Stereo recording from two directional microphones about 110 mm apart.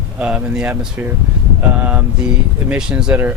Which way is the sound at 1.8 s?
15° right (ahead or behind).